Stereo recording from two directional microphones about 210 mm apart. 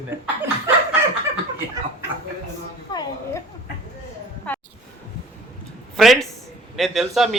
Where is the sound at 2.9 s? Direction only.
20° left (ahead or behind).